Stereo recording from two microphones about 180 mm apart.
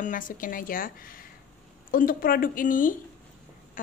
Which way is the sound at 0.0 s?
50° left (ahead or behind).